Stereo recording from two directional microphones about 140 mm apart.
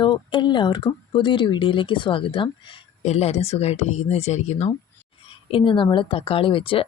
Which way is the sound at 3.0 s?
50° left (ahead or behind).